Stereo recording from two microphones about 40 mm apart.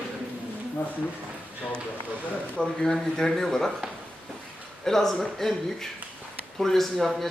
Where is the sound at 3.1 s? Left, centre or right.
Centre.